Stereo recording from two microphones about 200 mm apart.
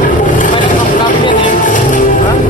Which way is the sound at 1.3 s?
40° left (ahead or behind).